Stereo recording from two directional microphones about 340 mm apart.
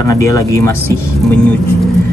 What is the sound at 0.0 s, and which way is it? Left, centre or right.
Speech, centre.